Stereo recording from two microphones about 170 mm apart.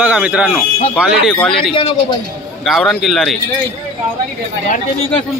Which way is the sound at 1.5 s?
30° left (ahead or behind).